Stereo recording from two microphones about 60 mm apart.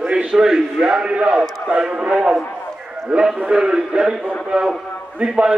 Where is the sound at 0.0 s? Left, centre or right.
Centre.